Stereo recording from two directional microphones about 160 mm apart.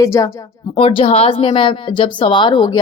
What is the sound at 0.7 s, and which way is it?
Speech, 35° left (ahead or behind).